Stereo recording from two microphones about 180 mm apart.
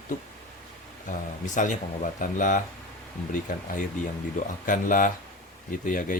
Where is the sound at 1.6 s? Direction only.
45° left (ahead or behind).